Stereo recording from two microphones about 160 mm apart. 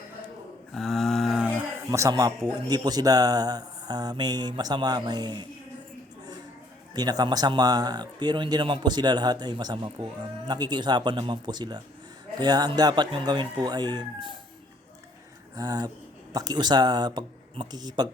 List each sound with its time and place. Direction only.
0.7 s a sound: centre (ahead or behind)
1.9 s speech: 20° right (ahead or behind)
6.9 s speech: 25° right (ahead or behind)
15.5 s speech: 25° right (ahead or behind)